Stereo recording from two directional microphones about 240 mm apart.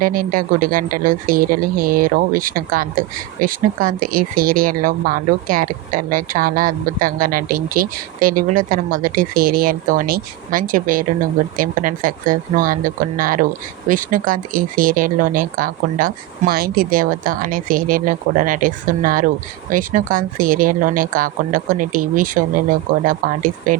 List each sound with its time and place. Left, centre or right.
0.0 s a woman's voice: right